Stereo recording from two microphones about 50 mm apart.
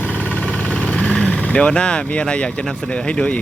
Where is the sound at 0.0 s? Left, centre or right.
Left.